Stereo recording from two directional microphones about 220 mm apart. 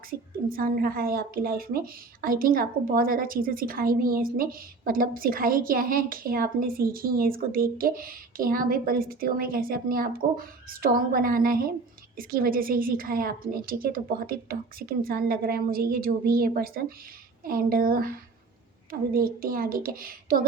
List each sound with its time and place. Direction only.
0.1 s a woman's voice: 40° right (ahead or behind)